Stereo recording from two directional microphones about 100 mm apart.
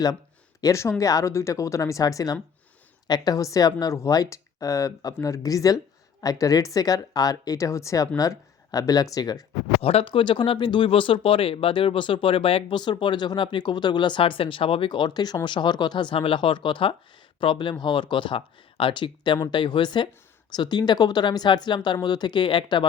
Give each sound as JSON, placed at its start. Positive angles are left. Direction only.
{"t": 0.6, "sound": "speech", "side_deg": 30}
{"t": 9.8, "sound": "speech", "side_deg": 70}
{"t": 12.8, "sound": "speech", "side_deg": 50}